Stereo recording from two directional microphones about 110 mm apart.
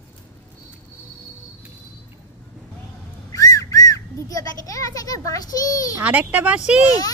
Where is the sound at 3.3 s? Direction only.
30° left (ahead or behind).